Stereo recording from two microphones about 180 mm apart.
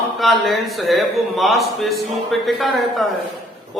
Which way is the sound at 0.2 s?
Centre (ahead or behind).